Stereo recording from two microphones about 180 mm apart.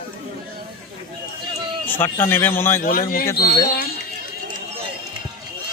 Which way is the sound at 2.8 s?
50° left (ahead or behind).